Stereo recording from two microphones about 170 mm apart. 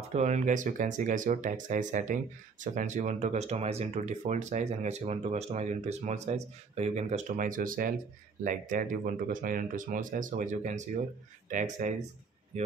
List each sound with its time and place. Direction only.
0.1 s speech: 45° right (ahead or behind)